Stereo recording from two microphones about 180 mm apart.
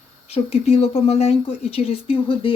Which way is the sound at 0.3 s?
35° left (ahead or behind).